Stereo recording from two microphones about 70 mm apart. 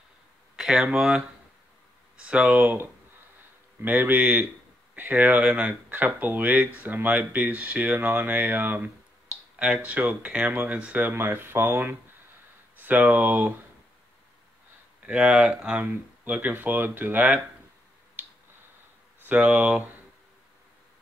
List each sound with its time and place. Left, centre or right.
0.6 s a sound: centre
0.9 s speech: centre
2.2 s speech: centre
3.8 s speech: right
15.0 s speech: centre
18.2 s finger snapping: right
19.2 s speech: right